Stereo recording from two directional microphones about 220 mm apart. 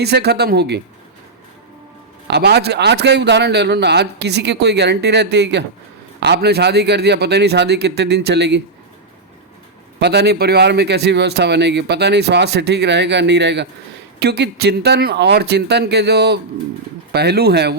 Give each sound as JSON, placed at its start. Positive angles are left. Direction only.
{"t": 0.0, "sound": "speech", "side_deg": -50}
{"t": 2.2, "sound": "speech", "side_deg": -50}
{"t": 10.0, "sound": "speech", "side_deg": -50}